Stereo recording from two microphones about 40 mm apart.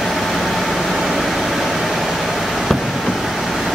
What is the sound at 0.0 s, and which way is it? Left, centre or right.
Vehicle, centre.